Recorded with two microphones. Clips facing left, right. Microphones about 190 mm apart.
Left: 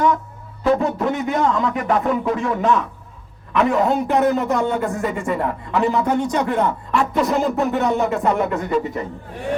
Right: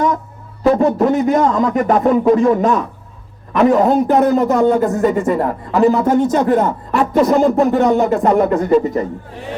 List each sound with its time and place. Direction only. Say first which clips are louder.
0.6 s a man's voice: right 6 dB; 40° right (ahead or behind)